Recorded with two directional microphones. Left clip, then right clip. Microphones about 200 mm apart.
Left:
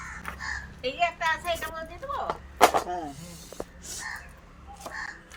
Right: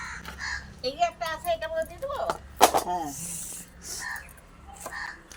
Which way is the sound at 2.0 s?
45° right (ahead or behind).